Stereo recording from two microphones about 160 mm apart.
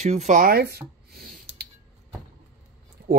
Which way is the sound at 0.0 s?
45° right (ahead or behind).